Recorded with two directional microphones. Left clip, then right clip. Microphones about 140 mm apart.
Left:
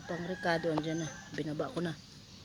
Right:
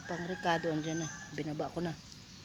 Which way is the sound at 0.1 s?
15° left (ahead or behind).